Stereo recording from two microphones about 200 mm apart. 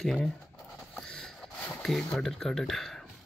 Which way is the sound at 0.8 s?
Centre (ahead or behind).